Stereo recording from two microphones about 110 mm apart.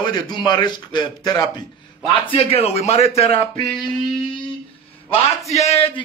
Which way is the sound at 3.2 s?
60° left (ahead or behind).